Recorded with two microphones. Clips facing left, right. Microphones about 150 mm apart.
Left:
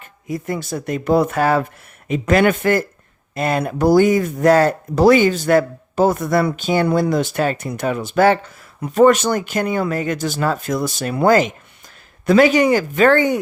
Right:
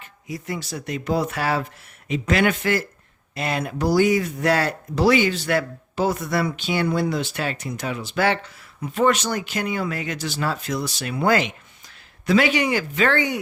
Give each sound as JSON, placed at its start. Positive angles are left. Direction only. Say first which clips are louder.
{"t": 0.0, "sound": "speech", "louder": "left 7 dB", "side_deg": 50}